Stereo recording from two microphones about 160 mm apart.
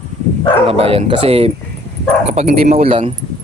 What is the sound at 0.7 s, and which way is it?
Speech, 40° right (ahead or behind).